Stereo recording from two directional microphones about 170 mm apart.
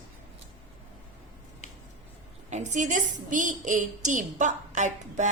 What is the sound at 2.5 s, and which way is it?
A woman's voice, 45° right (ahead or behind).